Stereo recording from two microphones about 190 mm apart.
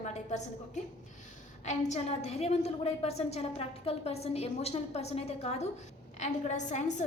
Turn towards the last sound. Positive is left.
turn(degrees=40)  # may be behind; listen again after turning